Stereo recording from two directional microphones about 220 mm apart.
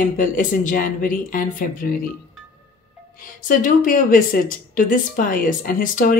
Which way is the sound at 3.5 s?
35° left (ahead or behind).